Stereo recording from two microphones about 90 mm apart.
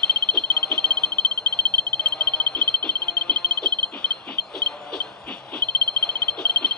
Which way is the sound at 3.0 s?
15° left (ahead or behind).